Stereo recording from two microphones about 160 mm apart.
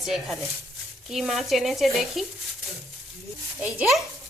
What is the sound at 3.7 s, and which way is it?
Speech, centre (ahead or behind).